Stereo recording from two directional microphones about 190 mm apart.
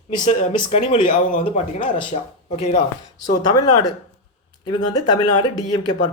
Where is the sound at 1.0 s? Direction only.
40° left (ahead or behind).